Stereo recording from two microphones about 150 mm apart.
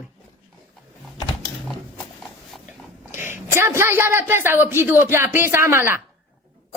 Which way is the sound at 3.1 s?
15° right (ahead or behind).